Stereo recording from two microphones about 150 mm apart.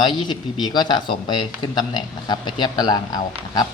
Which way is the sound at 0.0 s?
30° left (ahead or behind).